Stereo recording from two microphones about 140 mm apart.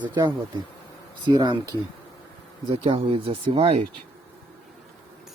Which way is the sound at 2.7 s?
45° right (ahead or behind).